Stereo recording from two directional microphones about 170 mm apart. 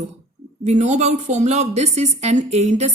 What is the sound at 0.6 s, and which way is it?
A woman's voice, 40° right (ahead or behind).